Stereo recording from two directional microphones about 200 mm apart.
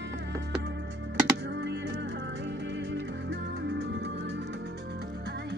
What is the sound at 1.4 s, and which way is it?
Music, 60° right (ahead or behind).